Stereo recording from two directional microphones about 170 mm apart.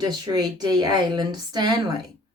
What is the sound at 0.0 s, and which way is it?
A woman's voice, 25° right (ahead or behind).